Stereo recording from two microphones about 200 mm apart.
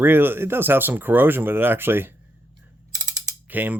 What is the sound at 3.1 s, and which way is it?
Mechanisms, 10° right (ahead or behind).